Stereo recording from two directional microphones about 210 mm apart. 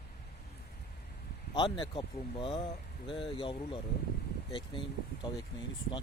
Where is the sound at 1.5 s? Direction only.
20° left (ahead or behind).